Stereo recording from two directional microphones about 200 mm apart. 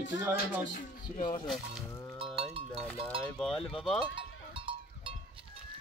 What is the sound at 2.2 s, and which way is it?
Sheep, 25° right (ahead or behind).